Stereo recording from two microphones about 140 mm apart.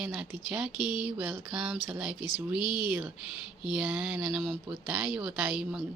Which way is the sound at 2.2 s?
30° left (ahead or behind).